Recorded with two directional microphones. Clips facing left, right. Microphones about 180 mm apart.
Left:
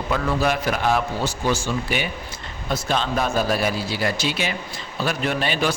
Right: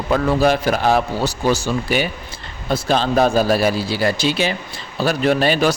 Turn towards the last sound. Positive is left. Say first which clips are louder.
# right 7 dB
turn(degrees=-40)  # may be behind; listen again after turning